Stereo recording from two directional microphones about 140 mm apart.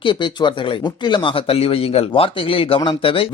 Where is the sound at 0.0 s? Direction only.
35° left (ahead or behind).